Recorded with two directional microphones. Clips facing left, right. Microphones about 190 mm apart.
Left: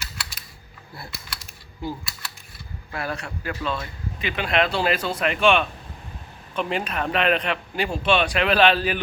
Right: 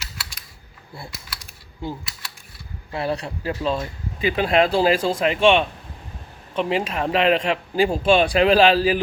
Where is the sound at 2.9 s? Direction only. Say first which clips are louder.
Right 5 dB; 30° right (ahead or behind).